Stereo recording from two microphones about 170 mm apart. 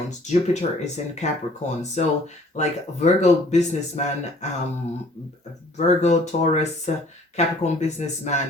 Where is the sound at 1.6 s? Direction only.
45° left (ahead or behind).